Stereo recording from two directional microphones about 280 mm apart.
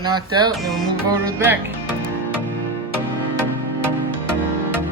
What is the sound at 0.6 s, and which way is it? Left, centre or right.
Music, centre.